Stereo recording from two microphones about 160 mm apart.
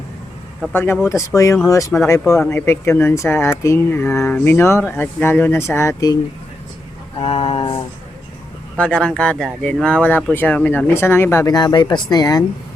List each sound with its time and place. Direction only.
0.7 s speech: 15° left (ahead or behind)
7.2 s a sound: 35° left (ahead or behind)
8.8 s speech: 5° left (ahead or behind); by 12.5 s 25° left (ahead or behind)